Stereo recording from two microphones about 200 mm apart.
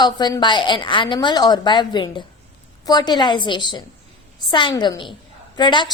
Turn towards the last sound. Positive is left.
turn(degrees=20)  # may be behind; listen again after turning